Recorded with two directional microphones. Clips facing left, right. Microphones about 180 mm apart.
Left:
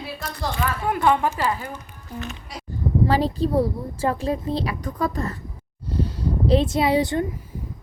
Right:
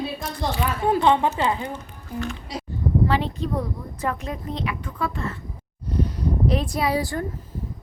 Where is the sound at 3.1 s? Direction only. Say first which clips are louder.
Left 4 dB; 35° left (ahead or behind).